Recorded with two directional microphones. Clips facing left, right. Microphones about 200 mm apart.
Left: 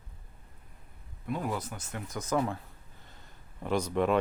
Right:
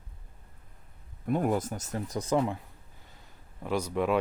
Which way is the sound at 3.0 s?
10° right (ahead or behind).